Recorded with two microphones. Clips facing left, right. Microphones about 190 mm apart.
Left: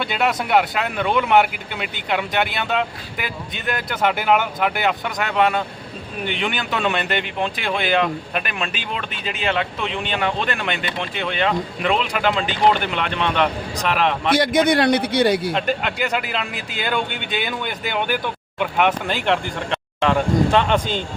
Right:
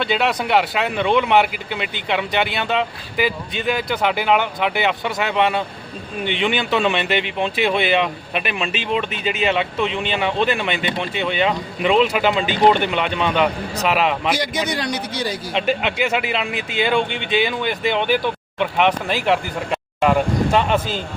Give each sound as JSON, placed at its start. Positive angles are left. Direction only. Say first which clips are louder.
{"t": 0.0, "sound": "speech", "louder": "right 2 dB", "side_deg": 0}
{"t": 14.3, "sound": "a man's voice", "louder": "left 7 dB", "side_deg": 55}
{"t": 15.5, "sound": "speech", "louder": "right 2 dB", "side_deg": 0}